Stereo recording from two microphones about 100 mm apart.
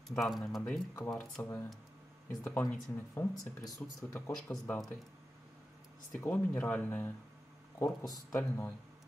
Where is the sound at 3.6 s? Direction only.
40° left (ahead or behind).